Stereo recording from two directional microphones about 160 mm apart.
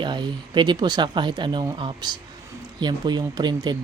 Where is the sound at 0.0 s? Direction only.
30° right (ahead or behind).